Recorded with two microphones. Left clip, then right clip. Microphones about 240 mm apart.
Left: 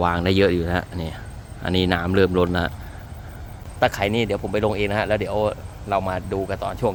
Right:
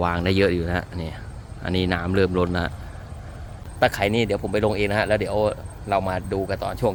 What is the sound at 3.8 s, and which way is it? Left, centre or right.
Speech, centre.